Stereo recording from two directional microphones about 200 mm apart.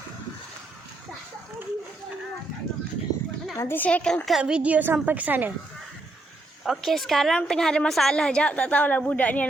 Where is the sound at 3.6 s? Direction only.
10° left (ahead or behind); by 5.5 s 10° right (ahead or behind).